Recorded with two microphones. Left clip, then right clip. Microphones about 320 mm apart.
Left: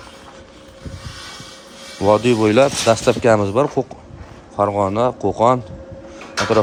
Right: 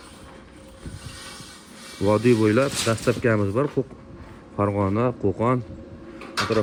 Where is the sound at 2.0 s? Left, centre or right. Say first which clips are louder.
Left 5 dB; centre.